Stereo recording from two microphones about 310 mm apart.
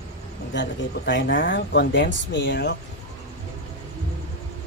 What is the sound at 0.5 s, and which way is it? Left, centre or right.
Speech, left.